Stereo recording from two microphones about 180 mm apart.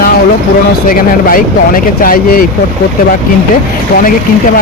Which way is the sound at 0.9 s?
50° left (ahead or behind).